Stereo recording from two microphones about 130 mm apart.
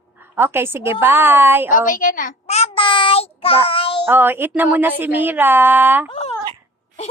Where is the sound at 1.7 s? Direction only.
90° left.